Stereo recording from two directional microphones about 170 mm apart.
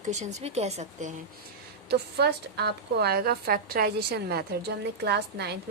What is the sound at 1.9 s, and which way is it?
A woman's voice, 70° right (ahead or behind).